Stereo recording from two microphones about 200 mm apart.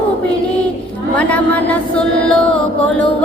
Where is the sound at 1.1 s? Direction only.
5° left (ahead or behind).